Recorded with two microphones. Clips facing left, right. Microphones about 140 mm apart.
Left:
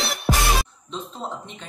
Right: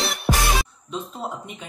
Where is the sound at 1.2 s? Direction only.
10° right (ahead or behind).